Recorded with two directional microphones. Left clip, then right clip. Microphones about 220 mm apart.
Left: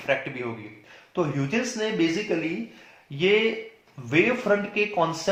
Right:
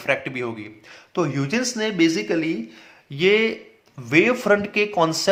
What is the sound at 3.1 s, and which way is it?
Speech, 30° right (ahead or behind).